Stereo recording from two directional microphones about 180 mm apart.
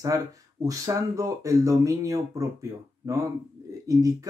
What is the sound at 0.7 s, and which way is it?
Speech, 20° right (ahead or behind).